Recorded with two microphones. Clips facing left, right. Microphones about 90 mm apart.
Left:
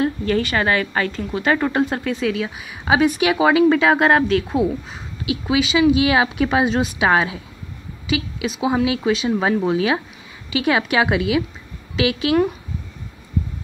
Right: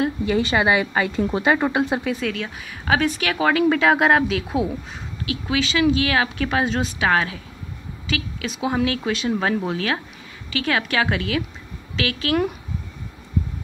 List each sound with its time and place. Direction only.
0.0 s speech: 10° right (ahead or behind)
2.8 s speech: 15° left (ahead or behind)
3.6 s speech: centre (ahead or behind)
5.2 s speech: 10° left (ahead or behind)
8.5 s speech: 5° left (ahead or behind)